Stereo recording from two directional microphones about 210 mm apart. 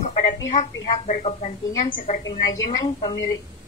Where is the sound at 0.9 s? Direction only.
30° left (ahead or behind).